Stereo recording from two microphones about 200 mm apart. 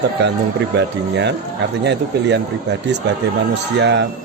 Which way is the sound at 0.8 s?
60° right (ahead or behind).